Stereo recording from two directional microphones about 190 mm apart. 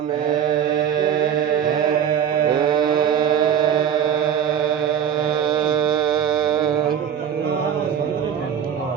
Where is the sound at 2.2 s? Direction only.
50° right (ahead or behind).